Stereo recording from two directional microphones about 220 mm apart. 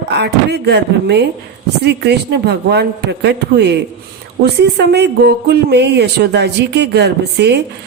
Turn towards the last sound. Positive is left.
turn(degrees=-50)  # may be behind; listen again after turning